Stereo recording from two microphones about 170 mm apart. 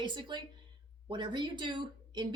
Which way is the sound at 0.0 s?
25° right (ahead or behind).